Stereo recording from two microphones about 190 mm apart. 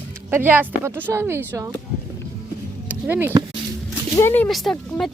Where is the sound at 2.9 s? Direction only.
10° right (ahead or behind).